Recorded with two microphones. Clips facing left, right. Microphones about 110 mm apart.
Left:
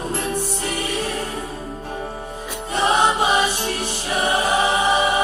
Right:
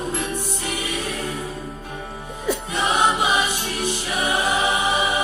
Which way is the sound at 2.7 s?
40° left (ahead or behind).